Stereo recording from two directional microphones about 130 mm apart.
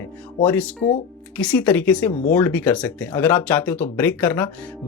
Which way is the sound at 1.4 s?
10° left (ahead or behind).